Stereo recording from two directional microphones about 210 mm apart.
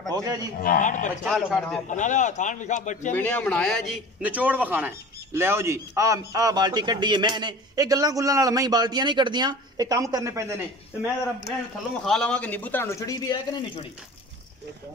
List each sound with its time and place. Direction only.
0.1 s a man's voice: 15° right (ahead or behind)
0.6 s a man's voice: 40° left (ahead or behind)
1.2 s a man's voice: centre (ahead or behind)
1.9 s a man's voice: 35° left (ahead or behind)
3.1 s a man's voice: 10° left (ahead or behind); by 10.6 s 15° right (ahead or behind)
12.0 s a man's voice: 5° left (ahead or behind)